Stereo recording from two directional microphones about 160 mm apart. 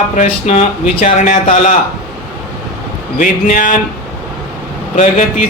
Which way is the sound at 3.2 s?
55° left (ahead or behind).